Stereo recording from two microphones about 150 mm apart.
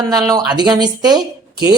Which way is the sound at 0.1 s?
25° right (ahead or behind).